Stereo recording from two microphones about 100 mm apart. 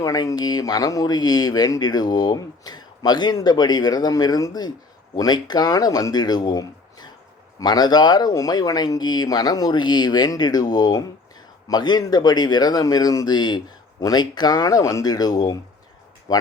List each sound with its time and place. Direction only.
0.0 s speech: 35° left (ahead or behind)